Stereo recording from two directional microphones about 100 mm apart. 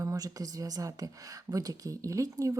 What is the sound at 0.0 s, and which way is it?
Speech, 35° right (ahead or behind).